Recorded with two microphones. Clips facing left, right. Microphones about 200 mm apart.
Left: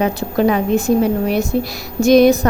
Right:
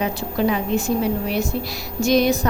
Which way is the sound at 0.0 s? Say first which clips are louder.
Left 6 dB; 55° left (ahead or behind).